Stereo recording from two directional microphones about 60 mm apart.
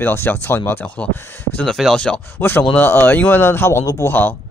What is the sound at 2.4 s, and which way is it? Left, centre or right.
Speech, left.